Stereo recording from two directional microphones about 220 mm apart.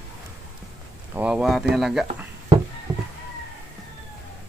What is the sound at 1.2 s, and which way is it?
Speech, 5° right (ahead or behind).